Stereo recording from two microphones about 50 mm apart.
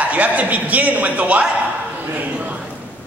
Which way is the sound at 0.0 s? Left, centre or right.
Right.